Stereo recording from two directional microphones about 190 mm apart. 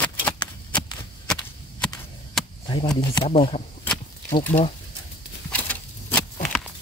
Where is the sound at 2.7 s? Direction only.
25° left (ahead or behind).